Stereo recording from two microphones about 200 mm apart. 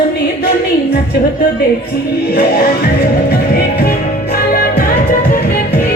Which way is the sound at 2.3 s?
50° left (ahead or behind).